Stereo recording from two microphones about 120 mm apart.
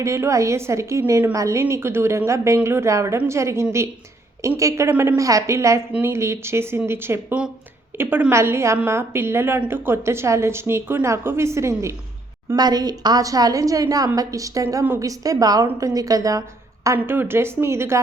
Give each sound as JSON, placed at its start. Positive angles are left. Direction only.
{"t": 0.0, "sound": "a woman's voice", "side_deg": -25}